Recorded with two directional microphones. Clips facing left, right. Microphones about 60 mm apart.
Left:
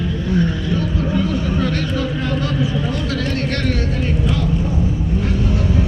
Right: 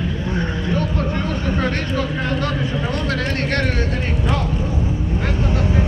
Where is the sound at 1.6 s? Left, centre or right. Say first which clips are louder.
Left 1 dB; right.